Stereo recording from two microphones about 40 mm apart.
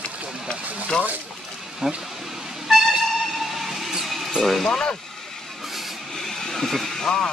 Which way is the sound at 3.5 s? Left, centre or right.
Centre.